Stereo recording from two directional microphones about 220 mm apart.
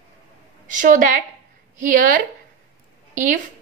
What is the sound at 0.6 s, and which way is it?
A woman's voice, 35° right (ahead or behind).